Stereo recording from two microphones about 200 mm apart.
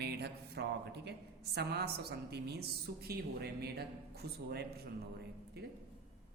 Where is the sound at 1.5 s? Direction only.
55° right (ahead or behind).